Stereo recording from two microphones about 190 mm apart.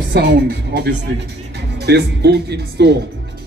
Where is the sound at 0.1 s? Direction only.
65° right (ahead or behind).